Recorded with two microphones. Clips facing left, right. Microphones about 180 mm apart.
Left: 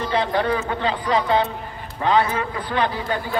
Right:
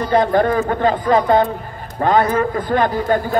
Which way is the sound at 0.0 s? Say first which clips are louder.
Right 6 dB; 45° right (ahead or behind).